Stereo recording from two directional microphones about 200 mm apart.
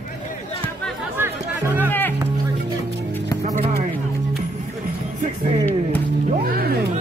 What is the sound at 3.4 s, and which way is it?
Music, 35° right (ahead or behind).